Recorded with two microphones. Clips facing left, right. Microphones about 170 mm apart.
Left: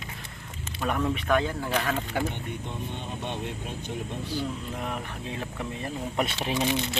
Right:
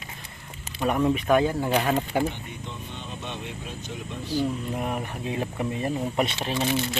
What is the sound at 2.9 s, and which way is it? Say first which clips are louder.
Speech: left 2 dB; 55° left (ahead or behind).